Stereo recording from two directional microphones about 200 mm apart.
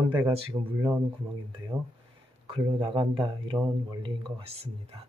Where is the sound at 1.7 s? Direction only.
15° right (ahead or behind).